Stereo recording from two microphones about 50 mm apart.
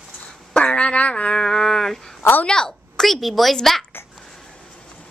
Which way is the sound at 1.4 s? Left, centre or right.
Centre.